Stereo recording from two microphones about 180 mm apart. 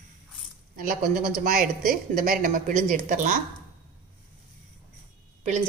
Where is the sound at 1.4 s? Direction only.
55° right (ahead or behind).